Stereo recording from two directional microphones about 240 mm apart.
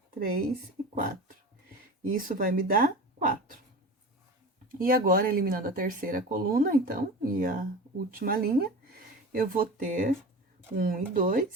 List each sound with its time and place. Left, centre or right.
0.1 s speech: right
2.0 s speech: right
4.8 s speech: right